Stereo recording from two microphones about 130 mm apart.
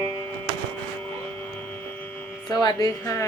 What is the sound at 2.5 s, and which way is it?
Music, 30° left (ahead or behind).